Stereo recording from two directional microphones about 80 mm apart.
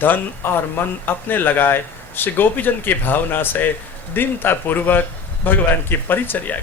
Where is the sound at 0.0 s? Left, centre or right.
Left.